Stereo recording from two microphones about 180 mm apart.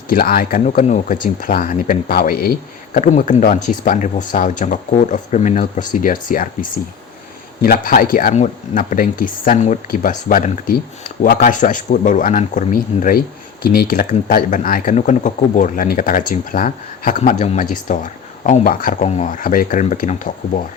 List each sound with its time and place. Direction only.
0.1 s speech: 55° left (ahead or behind)
2.9 s speech: 45° left (ahead or behind)